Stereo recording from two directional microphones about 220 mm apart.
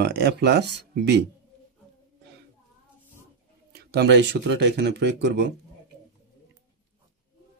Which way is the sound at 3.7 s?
45° right (ahead or behind).